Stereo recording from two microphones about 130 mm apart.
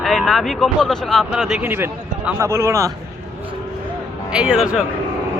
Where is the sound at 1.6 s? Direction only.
15° right (ahead or behind).